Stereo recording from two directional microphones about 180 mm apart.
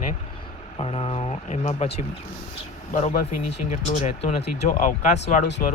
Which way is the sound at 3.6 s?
40° left (ahead or behind).